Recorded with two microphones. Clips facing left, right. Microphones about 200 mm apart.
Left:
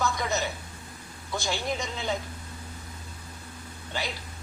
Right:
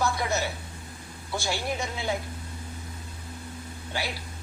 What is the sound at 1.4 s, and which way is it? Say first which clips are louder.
Speech: even; 10° right (ahead or behind).